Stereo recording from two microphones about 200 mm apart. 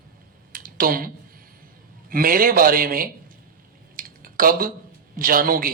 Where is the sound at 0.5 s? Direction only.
45° right (ahead or behind).